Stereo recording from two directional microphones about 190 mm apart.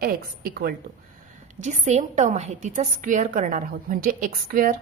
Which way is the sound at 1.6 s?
40° right (ahead or behind).